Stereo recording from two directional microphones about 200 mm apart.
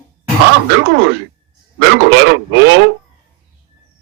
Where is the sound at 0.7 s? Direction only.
60° right (ahead or behind).